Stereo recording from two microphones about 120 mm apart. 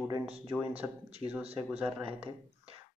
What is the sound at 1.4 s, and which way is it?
Speech, 55° right (ahead or behind).